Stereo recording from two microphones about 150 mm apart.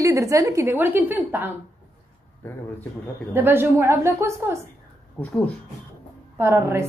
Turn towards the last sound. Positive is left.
turn(degrees=-15)  # may be behind; listen again after turning